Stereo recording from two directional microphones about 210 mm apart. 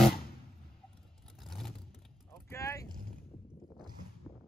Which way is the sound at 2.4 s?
15° left (ahead or behind).